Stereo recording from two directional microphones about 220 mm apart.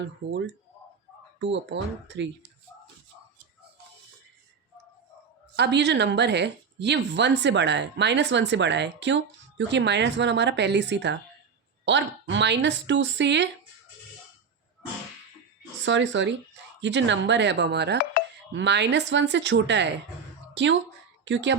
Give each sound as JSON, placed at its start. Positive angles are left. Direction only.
{"t": 0.0, "sound": "speech", "side_deg": -55}
{"t": 5.5, "sound": "speech", "side_deg": -50}
{"t": 15.8, "sound": "speech", "side_deg": -55}
{"t": 18.2, "sound": "music", "side_deg": 45}
{"t": 18.5, "sound": "a woman's voice", "side_deg": -50}